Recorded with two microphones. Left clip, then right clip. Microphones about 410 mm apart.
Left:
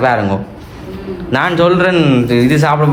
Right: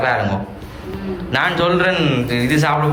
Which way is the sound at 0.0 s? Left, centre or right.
Centre.